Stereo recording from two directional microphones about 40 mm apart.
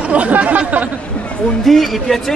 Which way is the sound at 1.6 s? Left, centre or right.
Centre.